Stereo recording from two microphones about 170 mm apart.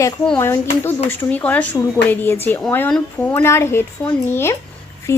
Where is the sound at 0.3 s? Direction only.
15° left (ahead or behind).